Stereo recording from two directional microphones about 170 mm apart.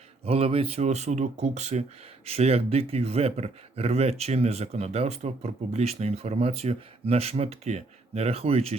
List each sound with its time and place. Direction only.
0.3 s speech: 35° right (ahead or behind)